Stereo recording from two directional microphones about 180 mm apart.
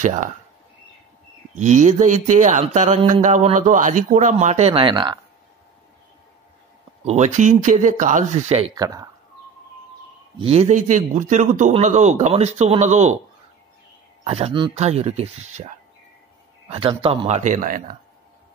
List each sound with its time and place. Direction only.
0.0 s speech: 45° right (ahead or behind)
1.5 s speech: 40° right (ahead or behind); by 5.2 s 25° right (ahead or behind)
7.1 s speech: 40° right (ahead or behind)
8.7 s speech: 20° right (ahead or behind)
10.4 s speech: 35° right (ahead or behind)
14.2 s speech: 35° right (ahead or behind)
16.6 s speech: 30° right (ahead or behind); by 17.9 s 50° right (ahead or behind)